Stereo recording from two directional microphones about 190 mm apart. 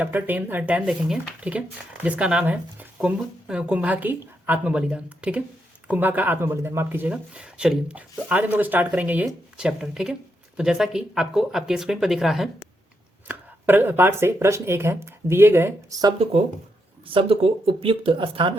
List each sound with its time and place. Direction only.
0.0 s speech: 10° right (ahead or behind)
17.1 s speech: 30° right (ahead or behind)